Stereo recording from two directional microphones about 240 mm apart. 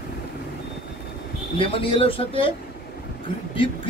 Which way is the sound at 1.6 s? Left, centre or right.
Left.